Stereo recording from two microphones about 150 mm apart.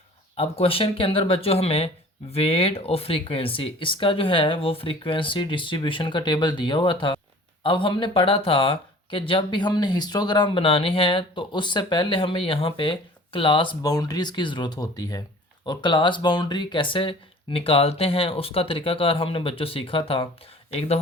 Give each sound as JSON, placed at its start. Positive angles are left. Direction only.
{"t": 0.3, "sound": "speech", "side_deg": 40}